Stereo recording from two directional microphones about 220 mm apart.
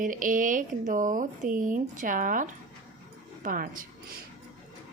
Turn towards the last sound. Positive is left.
turn(degrees=-40)  # may be behind; listen again after turning